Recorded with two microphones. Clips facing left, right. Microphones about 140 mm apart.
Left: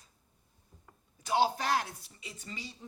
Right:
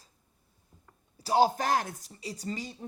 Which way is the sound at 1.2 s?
40° right (ahead or behind).